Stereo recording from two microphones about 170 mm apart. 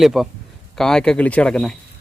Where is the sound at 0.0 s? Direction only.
Centre (ahead or behind).